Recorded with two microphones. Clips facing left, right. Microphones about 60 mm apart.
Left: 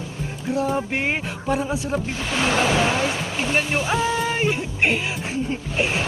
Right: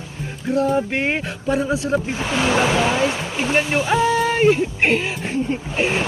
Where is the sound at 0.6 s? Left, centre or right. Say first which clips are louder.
Right 4 dB; right.